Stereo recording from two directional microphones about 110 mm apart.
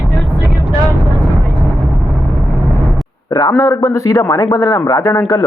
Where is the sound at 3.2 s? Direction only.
35° left (ahead or behind).